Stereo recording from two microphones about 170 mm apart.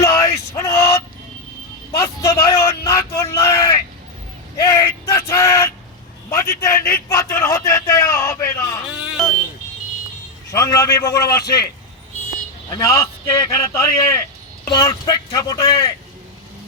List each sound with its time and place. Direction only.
0.0 s male singing: 20° left (ahead or behind)
2.0 s a sound: 15° left (ahead or behind)
10.5 s speech: 20° left (ahead or behind)
12.7 s a man's voice: 20° left (ahead or behind)